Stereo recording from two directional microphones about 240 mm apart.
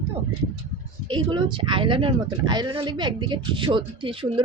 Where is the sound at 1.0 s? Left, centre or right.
Centre.